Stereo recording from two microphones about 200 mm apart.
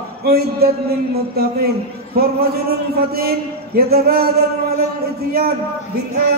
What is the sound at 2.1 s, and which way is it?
A man's voice, 50° right (ahead or behind).